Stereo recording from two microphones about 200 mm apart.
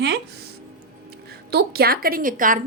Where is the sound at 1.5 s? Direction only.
50° right (ahead or behind).